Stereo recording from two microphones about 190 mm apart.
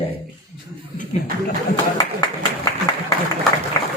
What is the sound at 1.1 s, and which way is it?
Speech, 35° left (ahead or behind).